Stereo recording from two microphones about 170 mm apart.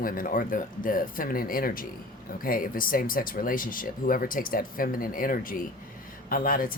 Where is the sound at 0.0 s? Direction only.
55° left (ahead or behind).